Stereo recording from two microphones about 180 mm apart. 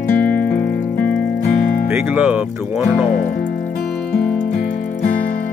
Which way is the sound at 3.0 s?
50° left (ahead or behind).